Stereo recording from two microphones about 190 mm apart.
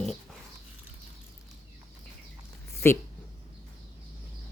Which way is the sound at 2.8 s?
15° left (ahead or behind).